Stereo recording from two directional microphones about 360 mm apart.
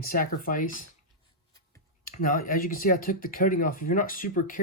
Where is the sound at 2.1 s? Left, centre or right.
Left.